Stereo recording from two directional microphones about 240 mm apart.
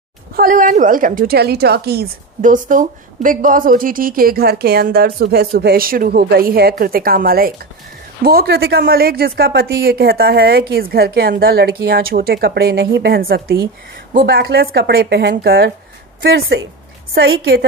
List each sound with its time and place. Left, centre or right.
0.4 s a woman's voice: right